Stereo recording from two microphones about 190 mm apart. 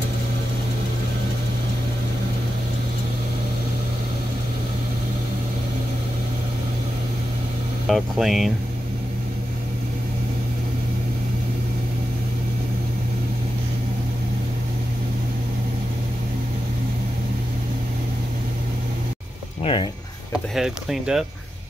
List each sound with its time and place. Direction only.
7.9 s speech: centre (ahead or behind)
19.6 s speech: 25° left (ahead or behind)
20.5 s speech: centre (ahead or behind)